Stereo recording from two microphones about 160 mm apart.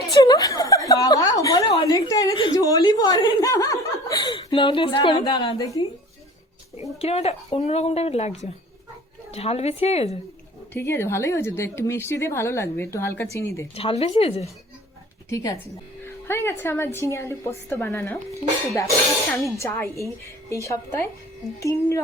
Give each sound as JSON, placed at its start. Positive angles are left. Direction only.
{"t": 0.1, "sound": "chuckle", "side_deg": 25}
{"t": 7.0, "sound": "speech", "side_deg": 40}
{"t": 10.8, "sound": "a woman's voice", "side_deg": 15}
{"t": 13.7, "sound": "speech", "side_deg": 40}
{"t": 15.3, "sound": "a woman's voice", "side_deg": 20}
{"t": 19.5, "sound": "a woman's voice", "side_deg": 15}